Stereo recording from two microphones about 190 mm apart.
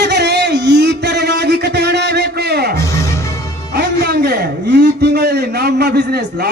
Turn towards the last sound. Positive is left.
turn(degrees=-60)  # may be behind; listen again after turning